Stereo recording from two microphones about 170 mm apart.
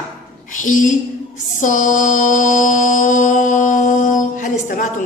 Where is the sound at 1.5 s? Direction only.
50° left (ahead or behind).